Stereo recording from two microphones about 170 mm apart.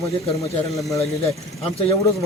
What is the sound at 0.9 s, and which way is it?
Speech, 20° left (ahead or behind).